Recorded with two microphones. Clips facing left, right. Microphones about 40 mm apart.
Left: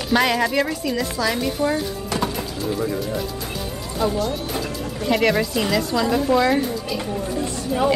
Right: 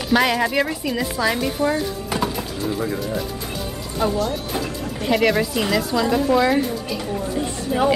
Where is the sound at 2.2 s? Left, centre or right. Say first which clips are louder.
Even; centre.